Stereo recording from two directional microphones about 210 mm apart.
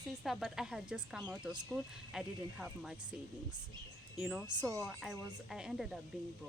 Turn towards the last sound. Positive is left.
turn(degrees=0)  # may be behind; listen again after turning